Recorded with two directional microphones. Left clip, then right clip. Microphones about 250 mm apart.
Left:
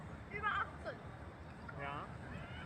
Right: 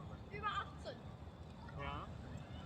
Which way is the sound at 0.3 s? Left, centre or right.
Right.